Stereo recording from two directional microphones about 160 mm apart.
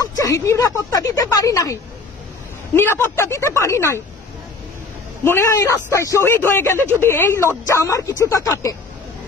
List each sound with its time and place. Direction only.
0.0 s a man's voice: 20° left (ahead or behind)
5.2 s a man's voice: 15° left (ahead or behind)